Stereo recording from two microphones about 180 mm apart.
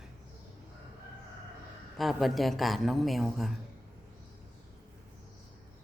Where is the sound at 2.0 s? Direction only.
Centre (ahead or behind).